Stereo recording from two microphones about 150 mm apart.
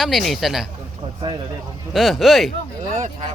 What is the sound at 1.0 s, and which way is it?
Speech, 35° right (ahead or behind).